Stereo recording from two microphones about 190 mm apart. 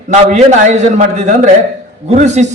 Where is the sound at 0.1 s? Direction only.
35° right (ahead or behind).